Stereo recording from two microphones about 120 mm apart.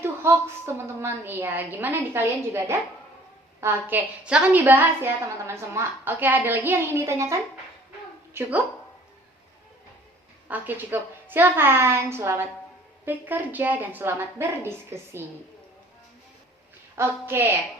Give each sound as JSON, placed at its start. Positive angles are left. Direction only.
{"t": 0.0, "sound": "a woman's voice", "side_deg": -20}
{"t": 10.5, "sound": "a woman's voice", "side_deg": -15}
{"t": 16.9, "sound": "a woman's voice", "side_deg": -20}